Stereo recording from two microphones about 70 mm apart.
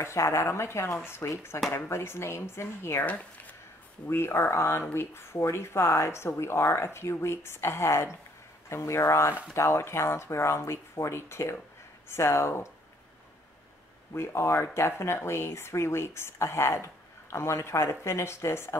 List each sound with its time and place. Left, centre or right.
0.0 s speech: left
3.1 s speech: left
4.1 s speech: left
14.1 s speech: left